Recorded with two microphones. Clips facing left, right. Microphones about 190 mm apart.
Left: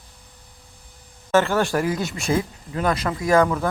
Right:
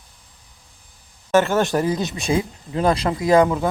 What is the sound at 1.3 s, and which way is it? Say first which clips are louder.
Speech: right 2 dB; 20° right (ahead or behind).